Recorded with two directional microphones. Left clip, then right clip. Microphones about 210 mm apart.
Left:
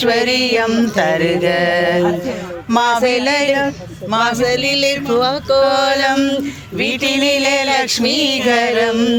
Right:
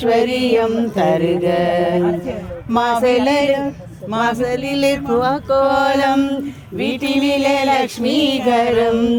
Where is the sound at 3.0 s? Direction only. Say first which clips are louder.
Even; 45° right (ahead or behind).